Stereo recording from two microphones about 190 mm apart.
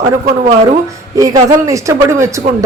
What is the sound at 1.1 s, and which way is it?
Speech, 15° right (ahead or behind).